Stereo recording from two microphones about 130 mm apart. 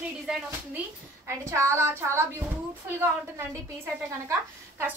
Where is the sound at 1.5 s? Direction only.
20° right (ahead or behind).